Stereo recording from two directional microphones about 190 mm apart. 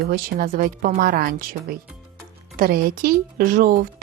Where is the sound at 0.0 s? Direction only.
50° right (ahead or behind).